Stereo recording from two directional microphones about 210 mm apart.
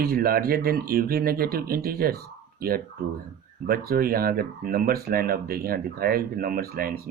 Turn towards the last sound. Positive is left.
turn(degrees=-45)  # may be behind; listen again after turning